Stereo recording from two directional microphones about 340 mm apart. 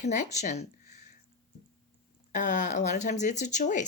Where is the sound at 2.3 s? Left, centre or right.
Left.